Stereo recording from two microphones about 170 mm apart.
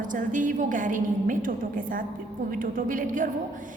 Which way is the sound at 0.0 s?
50° right (ahead or behind).